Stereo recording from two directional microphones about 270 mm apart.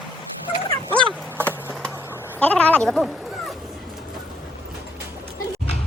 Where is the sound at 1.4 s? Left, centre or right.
Centre.